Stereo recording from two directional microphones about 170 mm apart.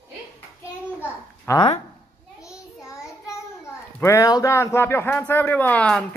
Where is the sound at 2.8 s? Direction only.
15° left (ahead or behind).